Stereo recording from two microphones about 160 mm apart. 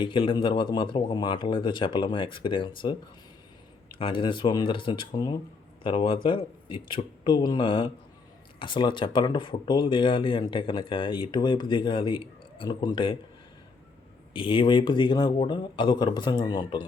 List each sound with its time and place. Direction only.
0.0 s a man's voice: 30° left (ahead or behind)
3.9 s speech: 30° left (ahead or behind)
14.3 s a man's voice: 30° left (ahead or behind)